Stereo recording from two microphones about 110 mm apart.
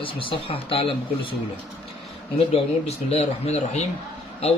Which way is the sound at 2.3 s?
70° left (ahead or behind).